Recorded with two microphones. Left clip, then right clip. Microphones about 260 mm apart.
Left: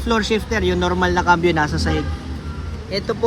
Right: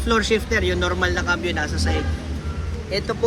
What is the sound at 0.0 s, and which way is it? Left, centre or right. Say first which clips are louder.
Speech: even; left.